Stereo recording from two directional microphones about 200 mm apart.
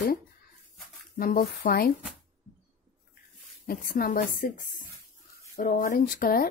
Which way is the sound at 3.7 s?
50° left (ahead or behind).